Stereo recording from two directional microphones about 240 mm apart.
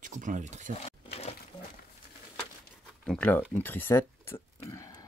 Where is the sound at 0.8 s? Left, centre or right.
Left.